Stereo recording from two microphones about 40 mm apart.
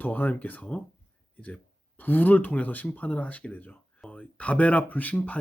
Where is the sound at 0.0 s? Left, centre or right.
Left.